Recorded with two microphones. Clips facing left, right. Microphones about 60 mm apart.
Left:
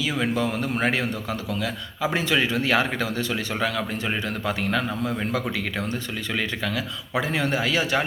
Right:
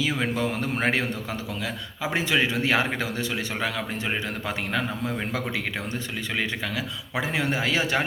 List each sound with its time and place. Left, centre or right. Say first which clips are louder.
0.2 s a man's voice: left 2 dB; right
7.2 s a man's voice: left 2 dB; centre